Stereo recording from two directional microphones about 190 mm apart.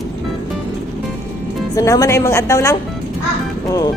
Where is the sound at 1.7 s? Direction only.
20° left (ahead or behind).